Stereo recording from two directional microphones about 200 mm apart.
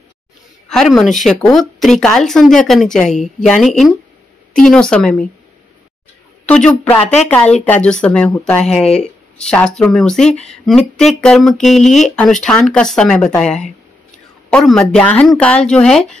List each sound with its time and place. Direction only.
0.7 s a woman's voice: centre (ahead or behind)
6.4 s a woman's voice: 5° left (ahead or behind)
7.0 s a woman's voice: 35° left (ahead or behind)
7.2 s a woman's voice: 5° left (ahead or behind)
10.3 s a woman's voice: 30° left (ahead or behind)
11.0 s a woman's voice: 5° left (ahead or behind)